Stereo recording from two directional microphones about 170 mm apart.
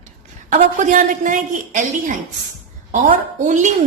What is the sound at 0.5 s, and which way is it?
A woman's voice, 50° right (ahead or behind).